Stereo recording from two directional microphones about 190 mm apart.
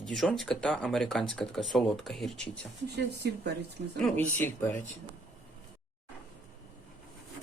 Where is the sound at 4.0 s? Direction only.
10° left (ahead or behind).